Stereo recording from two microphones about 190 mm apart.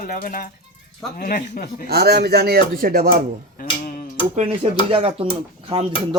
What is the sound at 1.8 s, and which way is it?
Speech, 55° right (ahead or behind).